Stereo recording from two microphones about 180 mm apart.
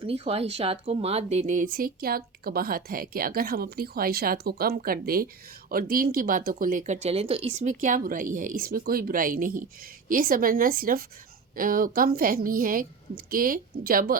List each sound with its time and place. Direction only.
0.0 s speech: 35° right (ahead or behind); by 14.2 s 55° right (ahead or behind)